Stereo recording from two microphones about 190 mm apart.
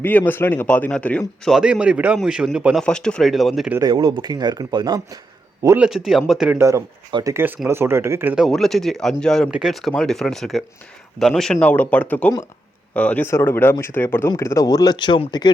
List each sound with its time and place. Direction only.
0.0 s speech: 10° left (ahead or behind)
3.8 s speech: 20° right (ahead or behind)
5.6 s speech: 5° right (ahead or behind)
7.3 s speech: 10° right (ahead or behind)
8.4 s speech: centre (ahead or behind); by 15.5 s 25° left (ahead or behind)